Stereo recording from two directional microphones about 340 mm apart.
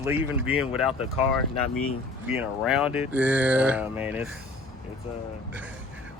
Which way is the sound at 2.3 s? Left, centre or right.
Centre.